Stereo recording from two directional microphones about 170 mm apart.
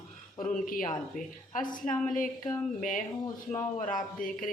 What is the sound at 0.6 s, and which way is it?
Speech, 55° left (ahead or behind).